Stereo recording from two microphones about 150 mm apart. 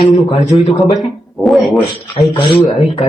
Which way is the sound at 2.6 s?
Centre (ahead or behind).